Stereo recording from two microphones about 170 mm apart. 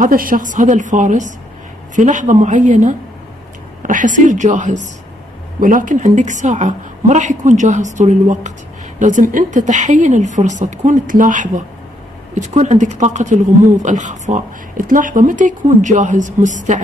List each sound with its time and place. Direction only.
0.0 s a woman's voice: 55° right (ahead or behind)